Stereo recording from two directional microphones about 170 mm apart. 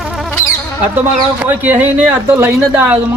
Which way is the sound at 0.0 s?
Centre (ahead or behind).